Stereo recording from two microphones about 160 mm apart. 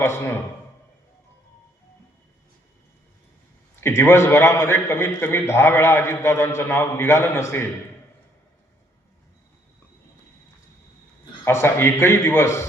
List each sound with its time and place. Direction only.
0.0 s a man's voice: 15° left (ahead or behind)
3.8 s a man's voice: 15° left (ahead or behind)
11.4 s a man's voice: 15° left (ahead or behind)